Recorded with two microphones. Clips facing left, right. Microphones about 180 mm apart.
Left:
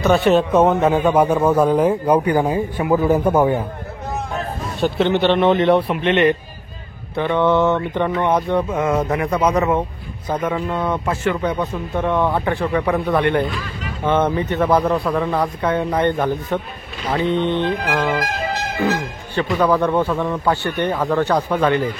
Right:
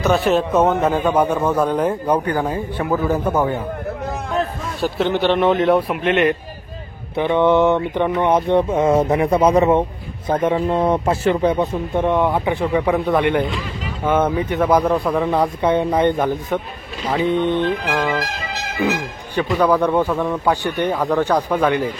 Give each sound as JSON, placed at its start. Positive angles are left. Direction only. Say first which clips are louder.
{"t": 0.0, "sound": "a man's voice", "louder": "left 2 dB", "side_deg": 0}
{"t": 4.8, "sound": "a man's voice", "louder": "left 2 dB", "side_deg": -5}
{"t": 7.2, "sound": "a man's voice", "louder": "right 2 dB", "side_deg": -15}
{"t": 15.1, "sound": "a man's voice", "louder": "right 2 dB", "side_deg": -20}
{"t": 17.5, "sound": "music", "louder": "right 1 dB", "side_deg": 20}
{"t": 18.2, "sound": "music", "louder": "left 4 dB", "side_deg": 50}
{"t": 18.8, "sound": "a man's voice", "louder": "right 2 dB", "side_deg": -15}